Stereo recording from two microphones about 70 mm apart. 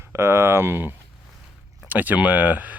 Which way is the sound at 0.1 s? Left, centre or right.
Right.